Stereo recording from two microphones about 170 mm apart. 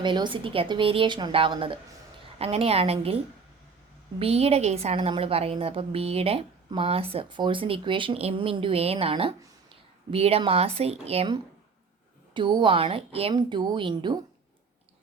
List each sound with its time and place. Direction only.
0.0 s a woman's voice: 25° right (ahead or behind)
4.2 s a woman's voice: 35° right (ahead or behind)